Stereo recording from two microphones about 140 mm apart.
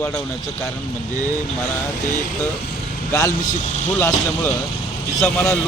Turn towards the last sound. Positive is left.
turn(degrees=5)  # may be behind; listen again after turning